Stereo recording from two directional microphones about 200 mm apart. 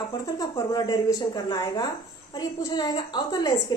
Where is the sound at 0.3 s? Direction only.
20° left (ahead or behind).